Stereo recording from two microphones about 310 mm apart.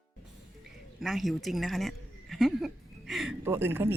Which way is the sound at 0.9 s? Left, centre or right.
Centre.